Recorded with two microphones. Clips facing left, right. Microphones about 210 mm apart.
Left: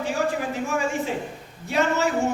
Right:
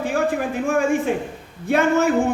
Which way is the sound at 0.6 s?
55° right (ahead or behind).